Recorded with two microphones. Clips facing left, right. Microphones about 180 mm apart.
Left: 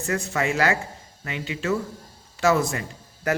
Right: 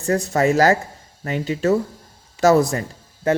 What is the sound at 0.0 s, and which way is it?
Speech, 35° right (ahead or behind).